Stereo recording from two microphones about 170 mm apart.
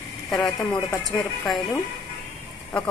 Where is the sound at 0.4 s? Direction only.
20° left (ahead or behind).